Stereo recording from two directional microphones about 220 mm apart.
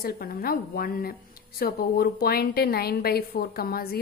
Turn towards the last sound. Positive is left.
turn(degrees=45)  # may be behind; listen again after turning